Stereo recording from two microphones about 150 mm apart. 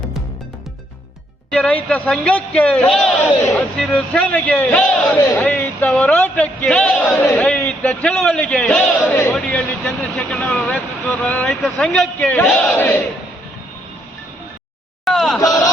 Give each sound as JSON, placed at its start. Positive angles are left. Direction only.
{"t": 1.5, "sound": "speech", "side_deg": 5}
{"t": 15.0, "sound": "a sound", "side_deg": 0}
{"t": 15.4, "sound": "speech", "side_deg": 25}